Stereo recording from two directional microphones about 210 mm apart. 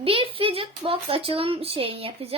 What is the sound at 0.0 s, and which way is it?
Speech, 25° right (ahead or behind).